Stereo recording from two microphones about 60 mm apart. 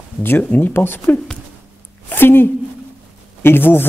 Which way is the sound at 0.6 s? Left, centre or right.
Left.